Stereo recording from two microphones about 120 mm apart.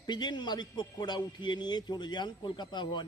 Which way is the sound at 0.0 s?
35° left (ahead or behind).